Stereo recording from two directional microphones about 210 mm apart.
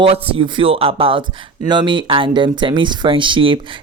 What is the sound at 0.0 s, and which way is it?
Speech, 25° right (ahead or behind).